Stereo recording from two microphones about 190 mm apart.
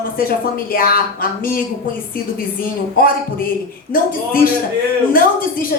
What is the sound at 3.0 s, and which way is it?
A woman's voice, 50° left (ahead or behind).